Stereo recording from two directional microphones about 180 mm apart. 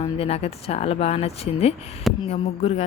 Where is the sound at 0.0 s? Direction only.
35° left (ahead or behind).